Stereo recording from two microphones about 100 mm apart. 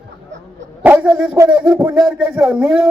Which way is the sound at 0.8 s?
15° right (ahead or behind).